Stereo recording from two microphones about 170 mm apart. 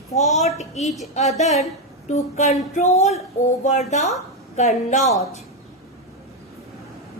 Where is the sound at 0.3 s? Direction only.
40° left (ahead or behind).